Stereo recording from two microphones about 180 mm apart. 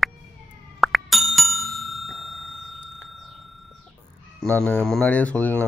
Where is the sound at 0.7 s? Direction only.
Centre (ahead or behind).